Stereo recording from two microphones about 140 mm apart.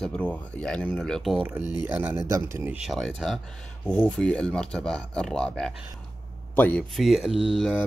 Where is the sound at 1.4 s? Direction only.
10° right (ahead or behind); by 6.8 s 10° left (ahead or behind).